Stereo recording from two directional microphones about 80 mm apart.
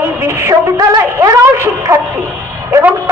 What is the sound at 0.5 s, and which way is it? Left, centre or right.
Speech, right.